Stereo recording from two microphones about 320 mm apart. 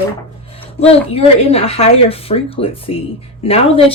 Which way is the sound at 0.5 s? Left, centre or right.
Centre.